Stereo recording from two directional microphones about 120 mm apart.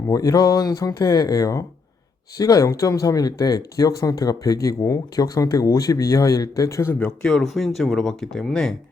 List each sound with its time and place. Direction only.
0.1 s speech: 30° left (ahead or behind)
7.0 s speech: 5° left (ahead or behind)